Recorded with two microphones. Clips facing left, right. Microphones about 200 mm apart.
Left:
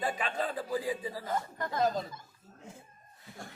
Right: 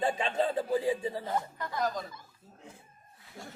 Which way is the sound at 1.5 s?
45° left (ahead or behind).